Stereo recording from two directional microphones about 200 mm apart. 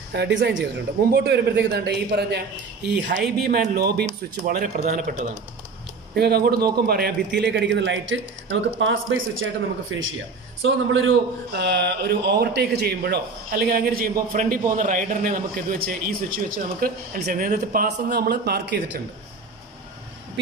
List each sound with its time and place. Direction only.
0.1 s a man's voice: 60° right (ahead or behind); by 5.2 s 40° right (ahead or behind)
6.1 s a man's voice: 50° right (ahead or behind)
16.5 s speech: 45° right (ahead or behind)